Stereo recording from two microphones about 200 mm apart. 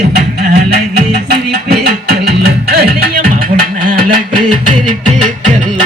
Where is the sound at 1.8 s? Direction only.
50° right (ahead or behind).